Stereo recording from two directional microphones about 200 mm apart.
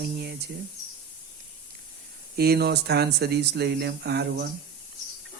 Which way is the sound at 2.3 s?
50° right (ahead or behind).